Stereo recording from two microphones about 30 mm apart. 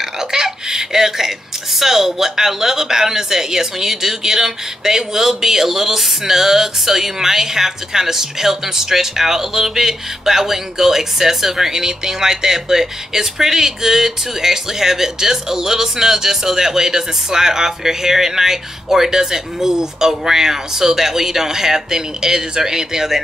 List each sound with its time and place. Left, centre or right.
0.3 s speech: centre